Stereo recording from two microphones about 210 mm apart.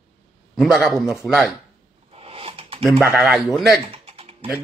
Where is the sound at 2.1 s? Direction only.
25° right (ahead or behind).